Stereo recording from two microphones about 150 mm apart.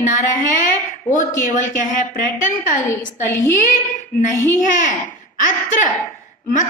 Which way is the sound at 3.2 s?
20° left (ahead or behind).